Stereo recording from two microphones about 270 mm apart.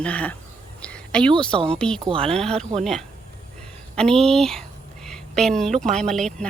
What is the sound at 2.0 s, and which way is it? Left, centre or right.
Speech, centre.